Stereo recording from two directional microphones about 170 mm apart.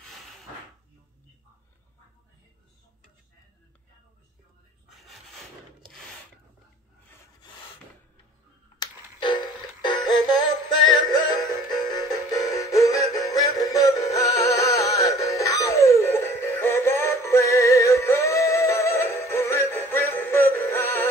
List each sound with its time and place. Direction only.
8.7 s music: 25° left (ahead or behind)